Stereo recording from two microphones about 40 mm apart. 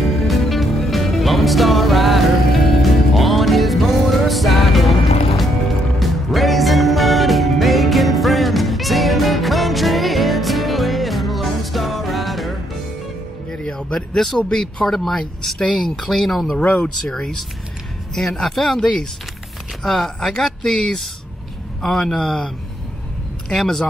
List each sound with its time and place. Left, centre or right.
0.0 s music: centre
5.9 s music: centre
13.5 s music: centre
13.9 s speech: centre
16.6 s speech: left
18.1 s speech: centre
23.5 s speech: centre